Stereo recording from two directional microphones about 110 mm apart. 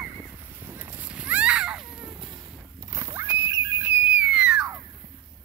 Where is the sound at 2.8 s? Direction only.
30° right (ahead or behind); by 4.7 s 10° right (ahead or behind).